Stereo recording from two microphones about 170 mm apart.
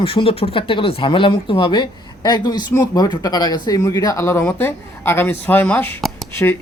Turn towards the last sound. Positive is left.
turn(degrees=15)  # may be behind; listen again after turning